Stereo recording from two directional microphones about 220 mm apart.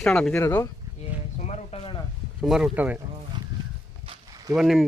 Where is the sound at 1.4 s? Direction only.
25° left (ahead or behind).